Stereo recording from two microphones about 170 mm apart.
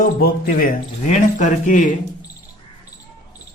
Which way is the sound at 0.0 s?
55° left (ahead or behind).